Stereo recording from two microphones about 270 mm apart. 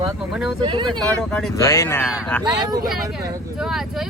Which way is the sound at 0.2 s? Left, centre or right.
Centre.